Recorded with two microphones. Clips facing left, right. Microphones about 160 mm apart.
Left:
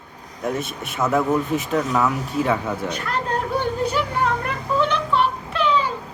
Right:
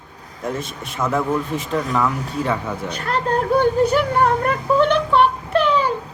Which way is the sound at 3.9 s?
50° right (ahead or behind).